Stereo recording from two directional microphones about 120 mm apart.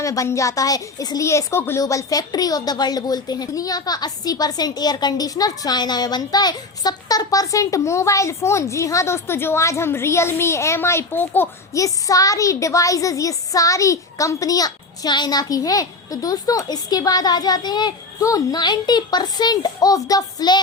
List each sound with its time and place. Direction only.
0.0 s a woman's voice: 25° left (ahead or behind)